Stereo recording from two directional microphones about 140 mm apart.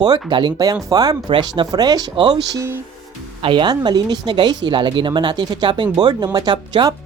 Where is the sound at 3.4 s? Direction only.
35° right (ahead or behind).